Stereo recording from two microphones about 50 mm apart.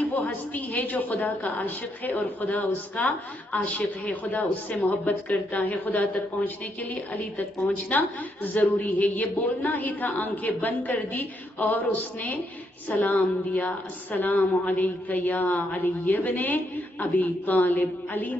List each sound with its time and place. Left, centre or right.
0.1 s speech: left